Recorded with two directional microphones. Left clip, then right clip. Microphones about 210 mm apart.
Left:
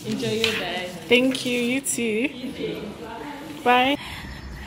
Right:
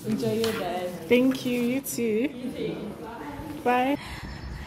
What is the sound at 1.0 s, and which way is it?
A woman's voice, 5° right (ahead or behind).